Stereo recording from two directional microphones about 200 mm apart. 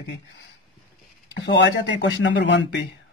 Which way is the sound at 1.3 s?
60° left (ahead or behind).